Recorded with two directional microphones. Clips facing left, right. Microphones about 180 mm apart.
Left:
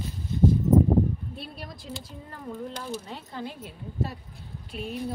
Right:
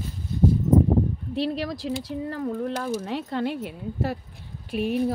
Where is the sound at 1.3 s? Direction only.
90° right.